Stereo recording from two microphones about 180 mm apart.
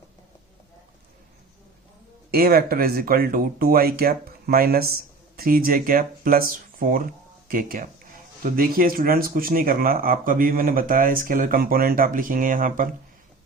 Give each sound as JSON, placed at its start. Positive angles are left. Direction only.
{"t": 2.3, "sound": "speech", "side_deg": -55}